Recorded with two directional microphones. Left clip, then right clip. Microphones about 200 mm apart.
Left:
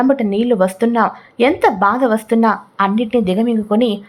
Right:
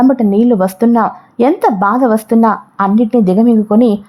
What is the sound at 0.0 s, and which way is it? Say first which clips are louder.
A woman's voice: right 4 dB; 25° right (ahead or behind).